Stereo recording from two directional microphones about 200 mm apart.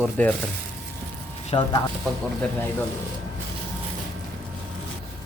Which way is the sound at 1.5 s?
20° left (ahead or behind).